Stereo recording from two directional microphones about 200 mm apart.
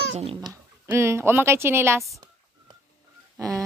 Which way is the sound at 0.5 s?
15° right (ahead or behind).